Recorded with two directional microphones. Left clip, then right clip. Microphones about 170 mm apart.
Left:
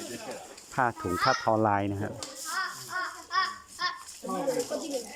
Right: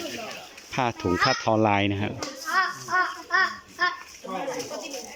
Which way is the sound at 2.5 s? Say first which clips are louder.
Right 9 dB; 45° right (ahead or behind).